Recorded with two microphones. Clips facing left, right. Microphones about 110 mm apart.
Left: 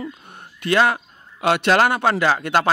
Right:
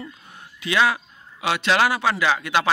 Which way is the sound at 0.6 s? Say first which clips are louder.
Left 3 dB; 50° left (ahead or behind).